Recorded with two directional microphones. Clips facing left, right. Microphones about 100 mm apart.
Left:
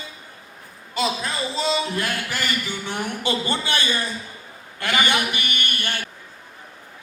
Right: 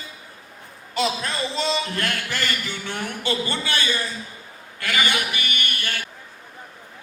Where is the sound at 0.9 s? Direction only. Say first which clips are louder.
Even; centre (ahead or behind); by 5.9 s 25° left (ahead or behind).